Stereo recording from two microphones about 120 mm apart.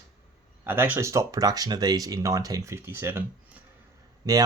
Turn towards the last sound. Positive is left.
turn(degrees=-25)  # may be behind; listen again after turning